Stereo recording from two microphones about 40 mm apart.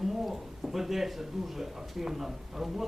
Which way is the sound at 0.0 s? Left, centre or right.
Centre.